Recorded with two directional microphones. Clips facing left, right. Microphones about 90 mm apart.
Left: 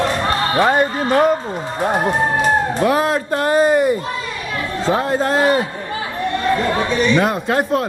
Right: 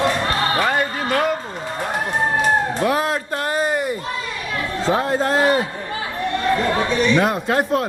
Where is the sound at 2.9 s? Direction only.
35° left (ahead or behind).